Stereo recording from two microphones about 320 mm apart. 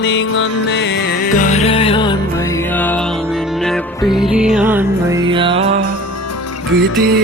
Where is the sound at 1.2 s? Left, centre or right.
Left.